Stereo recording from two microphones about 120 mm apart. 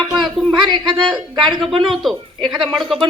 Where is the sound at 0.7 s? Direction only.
40° right (ahead or behind).